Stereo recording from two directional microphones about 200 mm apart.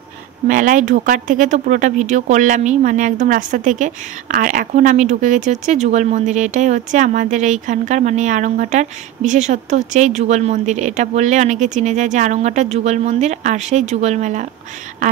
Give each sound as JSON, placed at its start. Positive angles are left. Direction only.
{"t": 0.5, "sound": "speech", "side_deg": -40}